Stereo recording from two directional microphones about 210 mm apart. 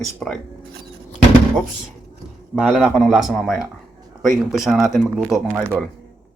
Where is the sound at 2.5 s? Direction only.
Centre (ahead or behind).